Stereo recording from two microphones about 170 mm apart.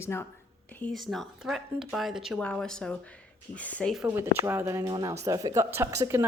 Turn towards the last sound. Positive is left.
turn(degrees=-15)  # may be behind; listen again after turning